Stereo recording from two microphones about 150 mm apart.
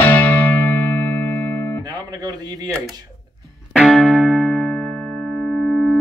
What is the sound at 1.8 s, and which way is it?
Speech, 25° right (ahead or behind).